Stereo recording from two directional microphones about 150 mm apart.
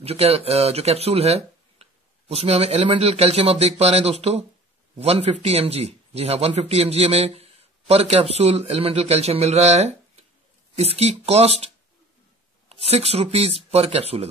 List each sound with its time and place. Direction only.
0.0 s a man's voice: 40° right (ahead or behind)
12.8 s a man's voice: 45° right (ahead or behind)